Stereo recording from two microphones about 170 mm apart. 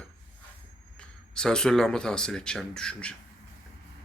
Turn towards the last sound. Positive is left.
turn(degrees=5)  # may be behind; listen again after turning